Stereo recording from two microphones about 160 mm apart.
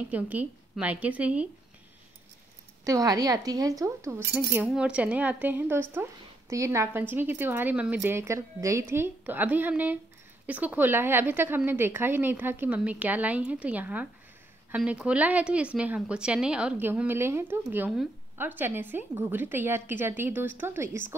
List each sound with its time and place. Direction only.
0.1 s a woman's voice: 10° right (ahead or behind)
2.8 s a woman's voice: 20° right (ahead or behind)